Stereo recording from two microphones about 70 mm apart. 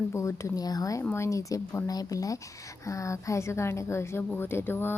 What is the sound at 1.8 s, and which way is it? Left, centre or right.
A woman's voice, left.